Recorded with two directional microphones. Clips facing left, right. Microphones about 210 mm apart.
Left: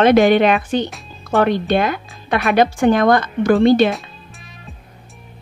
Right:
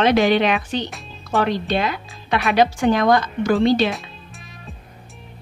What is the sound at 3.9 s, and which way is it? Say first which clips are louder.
Music: left 2 dB; centre (ahead or behind).